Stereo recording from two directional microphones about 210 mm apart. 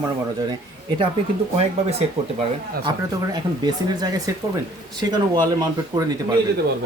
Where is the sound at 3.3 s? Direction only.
20° right (ahead or behind).